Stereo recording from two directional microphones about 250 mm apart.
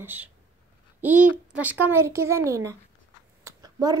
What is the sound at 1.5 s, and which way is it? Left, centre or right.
A woman's voice, centre.